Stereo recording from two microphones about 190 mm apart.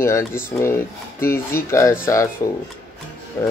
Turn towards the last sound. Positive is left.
turn(degrees=15)  # may be behind; listen again after turning